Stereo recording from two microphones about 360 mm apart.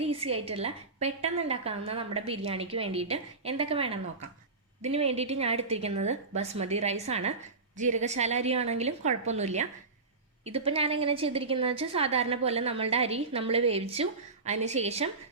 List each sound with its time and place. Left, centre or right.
0.0 s a woman's voice: centre